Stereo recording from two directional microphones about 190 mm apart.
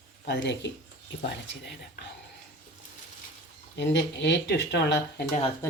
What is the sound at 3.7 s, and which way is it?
Speech, 65° left (ahead or behind).